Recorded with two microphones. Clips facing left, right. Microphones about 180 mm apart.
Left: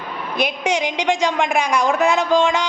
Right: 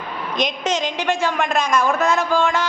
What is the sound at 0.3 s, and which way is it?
A woman's voice, 10° left (ahead or behind).